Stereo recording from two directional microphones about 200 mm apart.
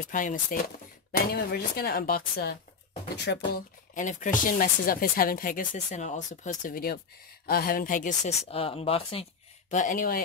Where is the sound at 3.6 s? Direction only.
40° left (ahead or behind).